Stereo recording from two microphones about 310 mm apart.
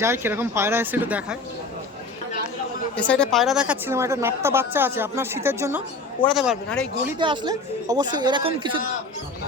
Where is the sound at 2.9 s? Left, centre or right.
Centre.